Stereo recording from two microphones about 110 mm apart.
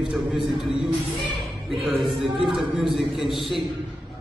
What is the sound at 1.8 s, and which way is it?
A man's voice, centre (ahead or behind).